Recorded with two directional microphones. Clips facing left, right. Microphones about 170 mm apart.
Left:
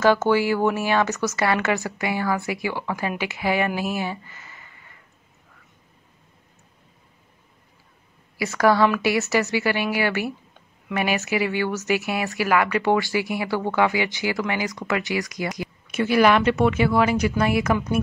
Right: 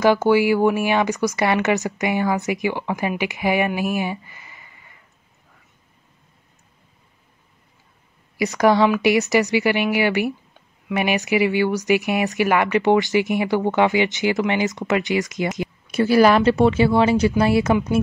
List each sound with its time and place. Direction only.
0.0 s speech: 15° right (ahead or behind)
8.4 s speech: 20° right (ahead or behind)
15.9 s speech: 35° right (ahead or behind)